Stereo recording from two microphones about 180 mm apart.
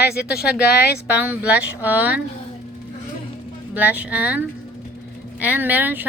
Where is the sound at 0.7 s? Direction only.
65° left (ahead or behind).